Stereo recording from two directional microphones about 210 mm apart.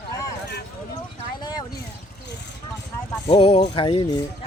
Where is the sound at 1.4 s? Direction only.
20° left (ahead or behind).